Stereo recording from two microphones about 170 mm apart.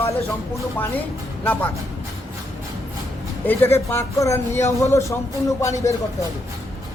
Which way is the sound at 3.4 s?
10° left (ahead or behind).